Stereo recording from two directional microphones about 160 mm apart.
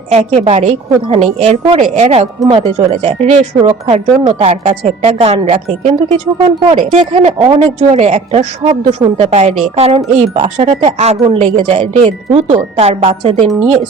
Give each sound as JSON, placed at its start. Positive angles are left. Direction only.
{"t": 0.1, "sound": "speech", "side_deg": -40}
{"t": 2.4, "sound": "speech", "side_deg": -30}
{"t": 13.4, "sound": "speech", "side_deg": 0}